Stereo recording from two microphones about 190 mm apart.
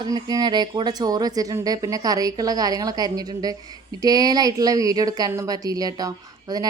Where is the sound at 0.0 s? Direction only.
20° right (ahead or behind).